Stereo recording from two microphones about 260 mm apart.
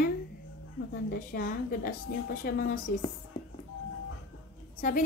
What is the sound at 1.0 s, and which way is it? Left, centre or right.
A woman's voice, left.